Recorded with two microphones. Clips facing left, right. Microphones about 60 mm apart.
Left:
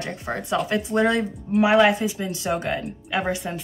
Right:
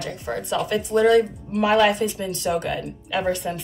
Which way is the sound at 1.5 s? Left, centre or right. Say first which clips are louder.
Left 3 dB; centre.